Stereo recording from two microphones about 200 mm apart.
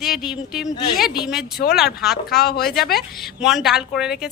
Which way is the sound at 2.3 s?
50° left (ahead or behind).